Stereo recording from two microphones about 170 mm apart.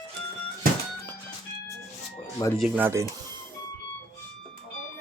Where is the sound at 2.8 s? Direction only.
15° right (ahead or behind).